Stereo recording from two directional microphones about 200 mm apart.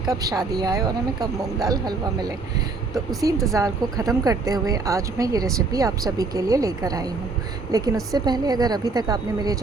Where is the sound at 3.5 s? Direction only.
15° right (ahead or behind).